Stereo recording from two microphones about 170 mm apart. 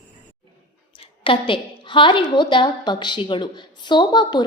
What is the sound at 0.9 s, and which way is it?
A woman's voice, 30° left (ahead or behind).